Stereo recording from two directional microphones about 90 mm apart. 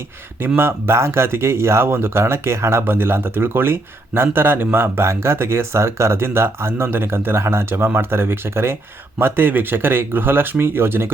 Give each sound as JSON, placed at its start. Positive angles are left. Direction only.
{"t": 0.4, "sound": "speech", "side_deg": -25}